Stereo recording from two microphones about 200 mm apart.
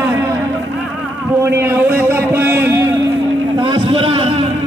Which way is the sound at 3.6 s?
25° right (ahead or behind).